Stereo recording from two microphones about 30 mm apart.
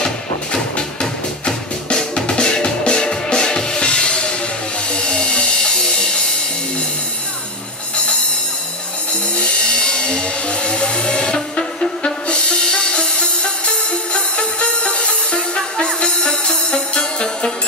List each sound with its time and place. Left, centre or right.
1.4 s music: left
9.4 s music: left